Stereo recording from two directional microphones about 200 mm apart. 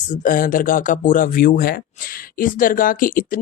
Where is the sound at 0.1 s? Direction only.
40° left (ahead or behind).